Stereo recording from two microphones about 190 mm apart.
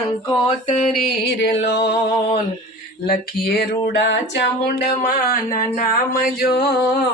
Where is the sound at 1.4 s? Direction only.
65° left (ahead or behind).